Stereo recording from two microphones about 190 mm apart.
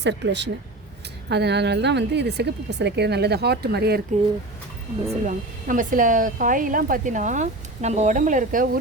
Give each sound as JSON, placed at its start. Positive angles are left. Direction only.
{"t": 0.0, "sound": "speech", "side_deg": -65}
{"t": 5.2, "sound": "speech", "side_deg": -45}